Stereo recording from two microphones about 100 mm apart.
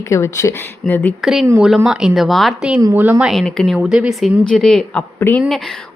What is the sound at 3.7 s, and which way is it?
Speech, 10° right (ahead or behind).